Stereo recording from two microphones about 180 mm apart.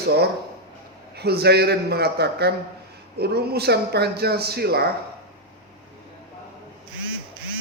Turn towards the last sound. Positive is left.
turn(degrees=-90)